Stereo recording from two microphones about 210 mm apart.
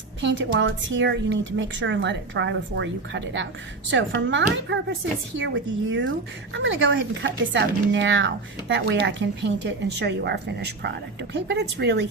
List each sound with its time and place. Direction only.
0.2 s a woman's voice: 65° right (ahead or behind)